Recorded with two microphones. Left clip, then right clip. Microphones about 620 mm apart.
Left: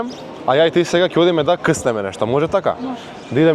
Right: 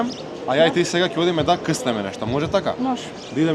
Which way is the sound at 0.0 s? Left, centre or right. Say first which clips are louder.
Left 4 dB; left.